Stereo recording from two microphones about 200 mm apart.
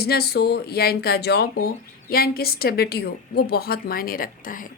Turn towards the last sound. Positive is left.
turn(degrees=40)  # may be behind; listen again after turning